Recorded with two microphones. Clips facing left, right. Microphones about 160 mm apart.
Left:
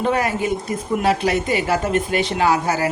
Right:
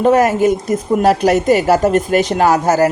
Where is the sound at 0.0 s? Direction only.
45° right (ahead or behind).